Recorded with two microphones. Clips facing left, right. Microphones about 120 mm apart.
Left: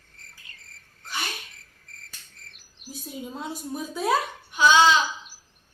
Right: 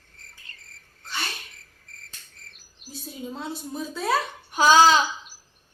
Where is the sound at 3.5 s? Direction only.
15° left (ahead or behind).